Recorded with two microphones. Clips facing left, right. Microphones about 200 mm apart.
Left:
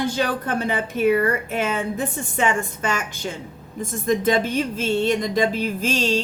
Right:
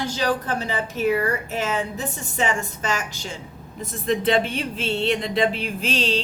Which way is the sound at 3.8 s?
45° left (ahead or behind).